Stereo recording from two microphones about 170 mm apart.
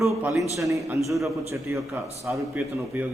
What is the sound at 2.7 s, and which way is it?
Speech, 15° right (ahead or behind).